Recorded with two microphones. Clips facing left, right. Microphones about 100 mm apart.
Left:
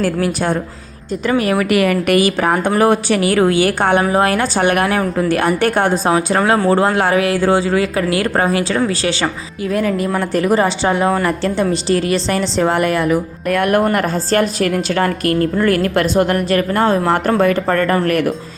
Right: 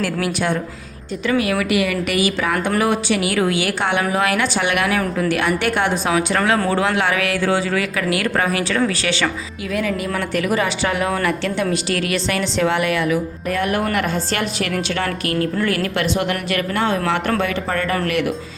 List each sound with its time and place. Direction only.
0.0 s a woman's voice: 40° left (ahead or behind)
13.5 s speech: 55° left (ahead or behind)
13.8 s a woman's voice: 40° left (ahead or behind)